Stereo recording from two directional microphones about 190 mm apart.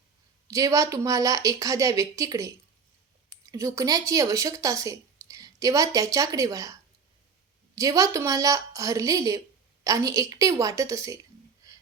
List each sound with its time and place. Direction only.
0.4 s speech: 15° right (ahead or behind)
7.8 s speech: 15° right (ahead or behind)